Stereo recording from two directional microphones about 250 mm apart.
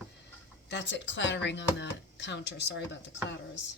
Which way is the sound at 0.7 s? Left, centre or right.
Left.